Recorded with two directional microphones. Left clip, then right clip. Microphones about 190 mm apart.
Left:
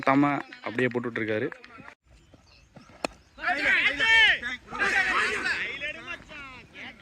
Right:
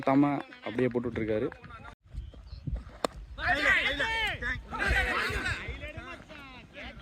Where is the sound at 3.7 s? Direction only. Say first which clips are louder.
Left 6 dB; 75° right (ahead or behind).